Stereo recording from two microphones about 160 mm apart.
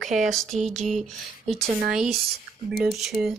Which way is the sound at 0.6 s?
45° right (ahead or behind).